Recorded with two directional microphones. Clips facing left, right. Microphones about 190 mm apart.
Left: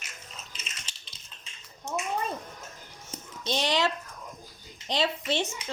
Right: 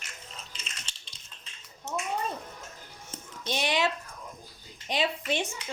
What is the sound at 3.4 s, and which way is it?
Speech, 10° right (ahead or behind).